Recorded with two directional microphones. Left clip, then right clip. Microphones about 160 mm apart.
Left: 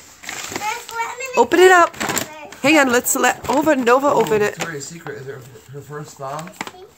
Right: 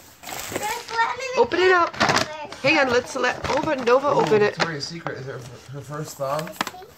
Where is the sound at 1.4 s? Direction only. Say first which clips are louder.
Left 9 dB; 90° left.